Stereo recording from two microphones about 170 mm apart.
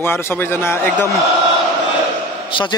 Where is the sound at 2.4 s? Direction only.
30° left (ahead or behind).